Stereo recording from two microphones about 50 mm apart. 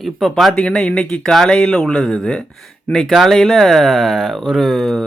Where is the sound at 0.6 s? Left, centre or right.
Left.